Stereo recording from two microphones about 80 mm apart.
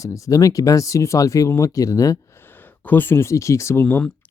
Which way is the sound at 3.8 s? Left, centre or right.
Centre.